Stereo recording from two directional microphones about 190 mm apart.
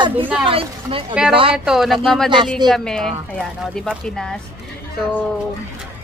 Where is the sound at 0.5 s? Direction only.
30° right (ahead or behind).